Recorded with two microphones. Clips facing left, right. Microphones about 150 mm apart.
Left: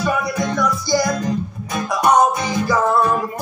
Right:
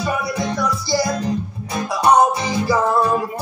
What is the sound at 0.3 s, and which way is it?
Music, 30° right (ahead or behind).